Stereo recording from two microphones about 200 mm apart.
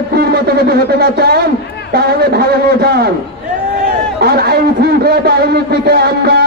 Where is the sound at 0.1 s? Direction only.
50° right (ahead or behind).